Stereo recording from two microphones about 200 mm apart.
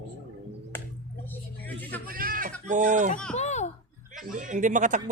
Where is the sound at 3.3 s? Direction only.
35° left (ahead or behind).